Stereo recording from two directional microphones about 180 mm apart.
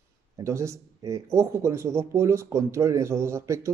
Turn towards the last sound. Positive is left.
turn(degrees=-15)  # may be behind; listen again after turning